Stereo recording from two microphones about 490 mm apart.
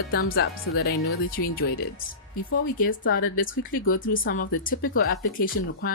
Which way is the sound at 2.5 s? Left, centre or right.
Centre.